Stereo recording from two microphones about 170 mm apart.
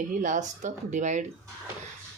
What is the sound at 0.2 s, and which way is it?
Speech, 45° right (ahead or behind).